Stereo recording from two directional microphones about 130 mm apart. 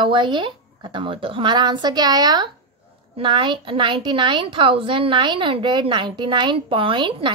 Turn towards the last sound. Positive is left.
turn(degrees=-40)  # may be behind; listen again after turning